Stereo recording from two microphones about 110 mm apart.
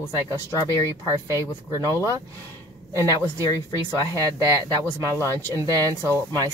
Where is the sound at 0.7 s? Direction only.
30° left (ahead or behind).